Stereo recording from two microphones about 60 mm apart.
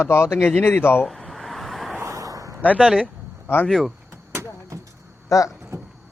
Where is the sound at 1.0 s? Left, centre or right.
Centre.